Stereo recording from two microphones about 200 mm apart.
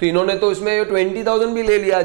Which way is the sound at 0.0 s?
15° right (ahead or behind).